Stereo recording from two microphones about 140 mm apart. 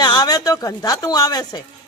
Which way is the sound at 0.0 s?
30° left (ahead or behind).